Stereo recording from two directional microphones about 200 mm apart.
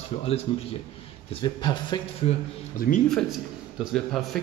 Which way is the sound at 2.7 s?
45° left (ahead or behind).